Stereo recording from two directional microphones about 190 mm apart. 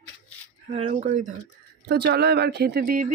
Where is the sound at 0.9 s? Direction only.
40° right (ahead or behind).